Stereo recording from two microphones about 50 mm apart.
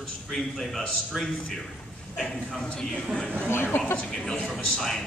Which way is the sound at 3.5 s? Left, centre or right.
Left.